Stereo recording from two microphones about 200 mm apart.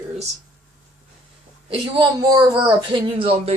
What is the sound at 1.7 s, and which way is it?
Speech, 20° right (ahead or behind).